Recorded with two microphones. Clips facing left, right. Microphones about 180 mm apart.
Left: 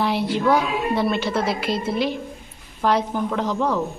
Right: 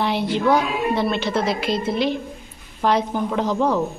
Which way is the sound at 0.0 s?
5° left (ahead or behind).